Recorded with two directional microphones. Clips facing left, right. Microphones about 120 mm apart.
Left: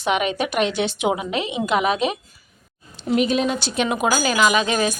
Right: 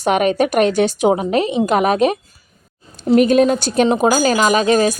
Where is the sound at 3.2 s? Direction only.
50° right (ahead or behind).